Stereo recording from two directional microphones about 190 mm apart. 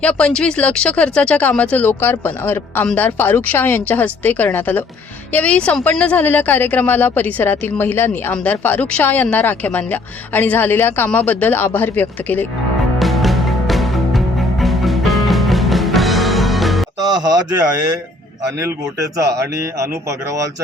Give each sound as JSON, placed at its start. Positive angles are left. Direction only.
{"t": 0.0, "sound": "speech", "side_deg": 5}
{"t": 13.0, "sound": "music", "side_deg": 0}
{"t": 17.0, "sound": "speech", "side_deg": -20}
{"t": 18.6, "sound": "speech", "side_deg": -15}